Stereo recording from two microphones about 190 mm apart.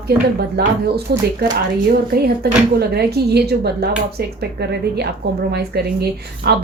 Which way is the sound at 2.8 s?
60° right (ahead or behind).